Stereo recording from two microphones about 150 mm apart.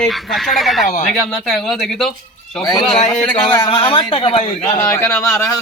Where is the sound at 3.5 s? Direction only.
30° left (ahead or behind).